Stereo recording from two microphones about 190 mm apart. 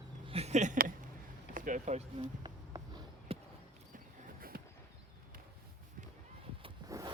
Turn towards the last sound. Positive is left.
turn(degrees=-20)  # may be behind; listen again after turning